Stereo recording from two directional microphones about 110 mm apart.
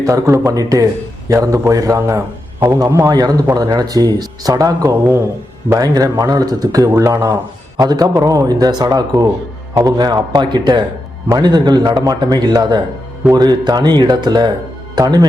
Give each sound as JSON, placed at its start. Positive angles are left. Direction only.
{"t": 0.0, "sound": "a man's voice", "side_deg": -30}
{"t": 3.1, "sound": "a man's voice", "side_deg": -35}